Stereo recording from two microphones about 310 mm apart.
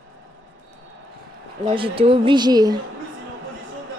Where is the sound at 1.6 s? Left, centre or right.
Centre.